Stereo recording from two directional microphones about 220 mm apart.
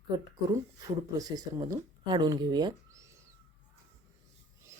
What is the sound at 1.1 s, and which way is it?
Speech, 15° right (ahead or behind).